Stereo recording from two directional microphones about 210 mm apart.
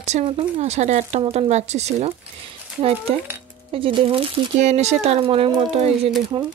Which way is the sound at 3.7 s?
25° right (ahead or behind).